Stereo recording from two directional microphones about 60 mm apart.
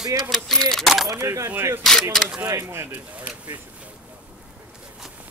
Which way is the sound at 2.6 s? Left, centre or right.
Right.